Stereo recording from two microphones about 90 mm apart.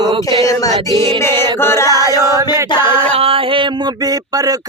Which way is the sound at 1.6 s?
30° left (ahead or behind).